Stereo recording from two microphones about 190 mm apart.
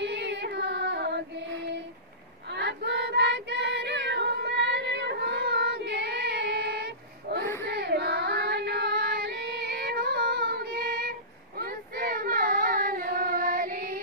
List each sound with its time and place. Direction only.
0.0 s female singing: 65° right (ahead or behind)
2.5 s child singing: 65° right (ahead or behind)
7.6 s female singing: 60° right (ahead or behind)